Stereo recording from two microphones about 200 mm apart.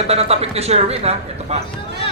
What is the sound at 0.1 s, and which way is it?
Speech, 30° right (ahead or behind).